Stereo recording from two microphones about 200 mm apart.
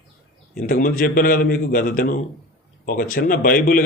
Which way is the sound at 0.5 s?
45° left (ahead or behind).